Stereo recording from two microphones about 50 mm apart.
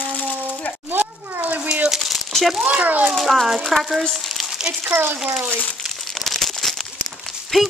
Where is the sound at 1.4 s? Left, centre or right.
Right.